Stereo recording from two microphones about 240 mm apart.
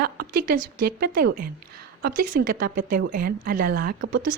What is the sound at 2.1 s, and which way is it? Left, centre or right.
Speech, right.